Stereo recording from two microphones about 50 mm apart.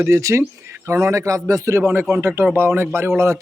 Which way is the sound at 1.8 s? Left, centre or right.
Right.